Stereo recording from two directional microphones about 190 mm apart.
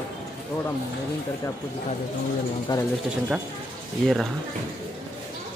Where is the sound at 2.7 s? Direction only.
20° left (ahead or behind).